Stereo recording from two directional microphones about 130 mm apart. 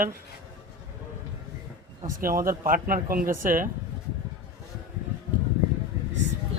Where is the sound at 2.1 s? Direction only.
90° right.